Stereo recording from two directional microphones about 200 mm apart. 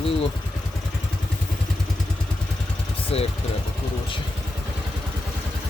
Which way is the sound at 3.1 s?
30° left (ahead or behind).